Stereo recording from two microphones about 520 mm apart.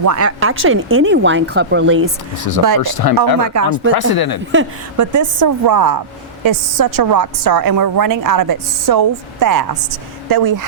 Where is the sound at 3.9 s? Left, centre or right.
Left.